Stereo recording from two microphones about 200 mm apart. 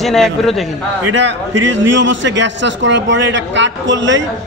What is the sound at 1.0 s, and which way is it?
A man's voice, 65° right (ahead or behind).